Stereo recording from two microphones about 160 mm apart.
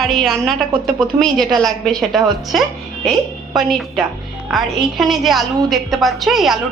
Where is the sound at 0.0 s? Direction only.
Centre (ahead or behind).